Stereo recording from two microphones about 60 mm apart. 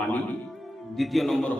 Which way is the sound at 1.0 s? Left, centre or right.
Centre.